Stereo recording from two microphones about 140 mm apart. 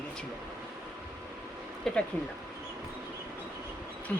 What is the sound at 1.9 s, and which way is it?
Speech, 5° left (ahead or behind).